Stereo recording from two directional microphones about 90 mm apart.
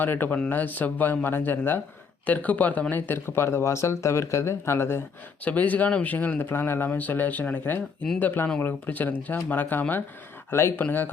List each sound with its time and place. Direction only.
0.0 s speech: 20° left (ahead or behind)
5.5 s speech: 15° left (ahead or behind)